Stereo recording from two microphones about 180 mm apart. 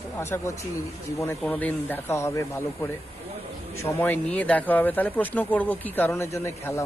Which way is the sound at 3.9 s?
10° left (ahead or behind).